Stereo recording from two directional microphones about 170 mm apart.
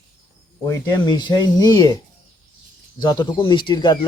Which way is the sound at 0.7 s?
20° left (ahead or behind).